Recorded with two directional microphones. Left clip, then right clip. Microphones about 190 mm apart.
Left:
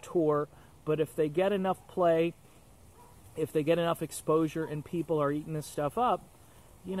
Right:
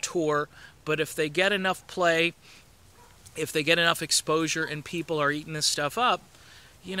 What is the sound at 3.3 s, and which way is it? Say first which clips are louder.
Speech: right 4 dB; 10° right (ahead or behind).